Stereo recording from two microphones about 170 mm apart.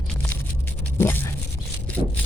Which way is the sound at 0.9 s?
15° left (ahead or behind).